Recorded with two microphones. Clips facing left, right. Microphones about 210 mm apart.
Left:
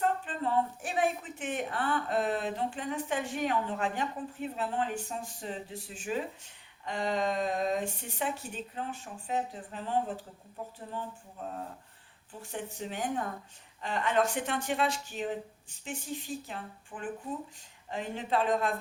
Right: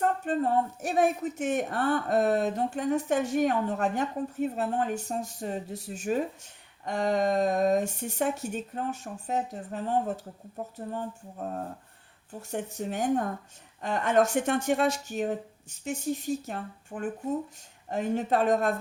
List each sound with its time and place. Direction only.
0.3 s speech: 45° right (ahead or behind)
11.4 s speech: 45° right (ahead or behind)